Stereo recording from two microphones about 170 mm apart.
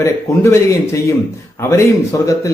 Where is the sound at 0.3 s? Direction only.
20° left (ahead or behind).